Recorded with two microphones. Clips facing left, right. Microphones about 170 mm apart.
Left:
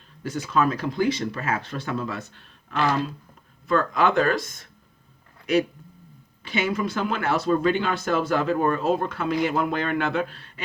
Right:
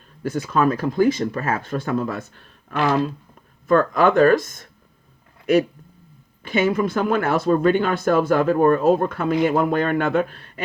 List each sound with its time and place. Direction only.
0.2 s speech: 50° right (ahead or behind)
6.4 s speech: 50° right (ahead or behind)